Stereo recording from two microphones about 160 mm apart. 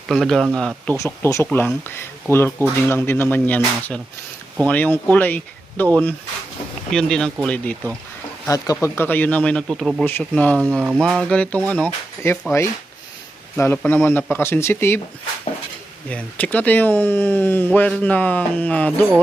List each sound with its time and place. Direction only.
0.1 s speech: centre (ahead or behind)
0.9 s speech: 20° left (ahead or behind)
6.9 s speech: 5° left (ahead or behind)
8.4 s speech: 20° left (ahead or behind)
16.0 s speech: 10° left (ahead or behind)